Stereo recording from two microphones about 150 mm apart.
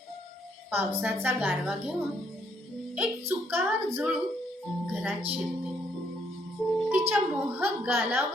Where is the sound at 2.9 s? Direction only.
10° right (ahead or behind).